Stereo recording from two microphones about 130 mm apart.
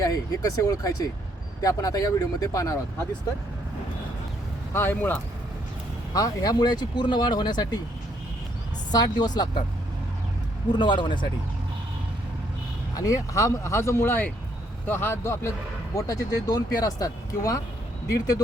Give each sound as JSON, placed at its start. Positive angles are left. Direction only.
{"t": 0.0, "sound": "speech", "side_deg": 25}
{"t": 4.7, "sound": "speech", "side_deg": 20}
{"t": 6.1, "sound": "speech", "side_deg": 30}
{"t": 8.9, "sound": "speech", "side_deg": 30}
{"t": 10.7, "sound": "speech", "side_deg": 35}
{"t": 13.0, "sound": "speech", "side_deg": 25}